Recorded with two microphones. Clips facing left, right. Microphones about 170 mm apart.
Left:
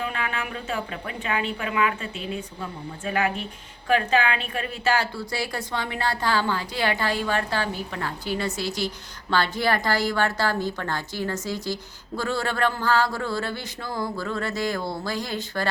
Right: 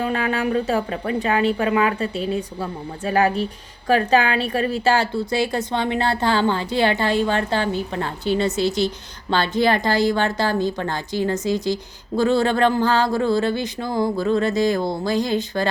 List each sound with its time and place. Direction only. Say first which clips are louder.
0.0 s a woman's voice: right 8 dB; 35° right (ahead or behind); by 15.7 s 20° right (ahead or behind)